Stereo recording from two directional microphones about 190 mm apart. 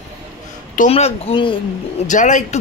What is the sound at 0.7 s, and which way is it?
Speech, 35° left (ahead or behind).